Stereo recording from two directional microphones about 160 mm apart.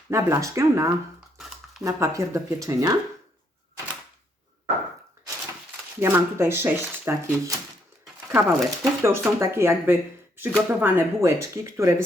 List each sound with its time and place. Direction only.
0.1 s speech: 20° right (ahead or behind)
2.0 s speech: 20° right (ahead or behind)
6.0 s speech: 15° right (ahead or behind)